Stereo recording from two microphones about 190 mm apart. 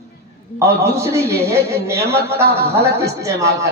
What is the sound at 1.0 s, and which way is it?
A man's voice, 15° right (ahead or behind).